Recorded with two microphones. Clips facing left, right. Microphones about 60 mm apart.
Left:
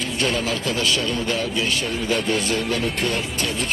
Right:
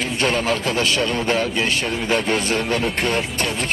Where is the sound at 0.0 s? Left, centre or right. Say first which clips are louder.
Right 3 dB; right.